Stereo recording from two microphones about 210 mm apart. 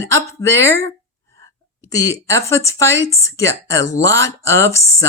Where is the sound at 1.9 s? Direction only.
60° right (ahead or behind).